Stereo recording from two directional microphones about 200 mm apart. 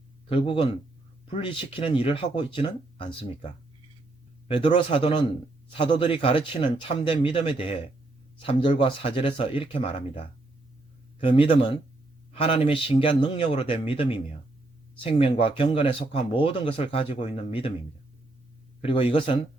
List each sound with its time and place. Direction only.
0.3 s speech: 25° left (ahead or behind)
4.4 s speech: 25° left (ahead or behind)
11.2 s speech: 25° left (ahead or behind)
18.8 s speech: 25° left (ahead or behind)